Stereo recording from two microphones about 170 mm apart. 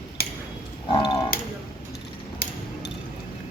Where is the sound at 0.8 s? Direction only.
25° left (ahead or behind).